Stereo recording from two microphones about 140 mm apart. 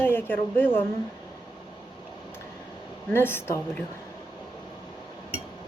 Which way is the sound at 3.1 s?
15° left (ahead or behind).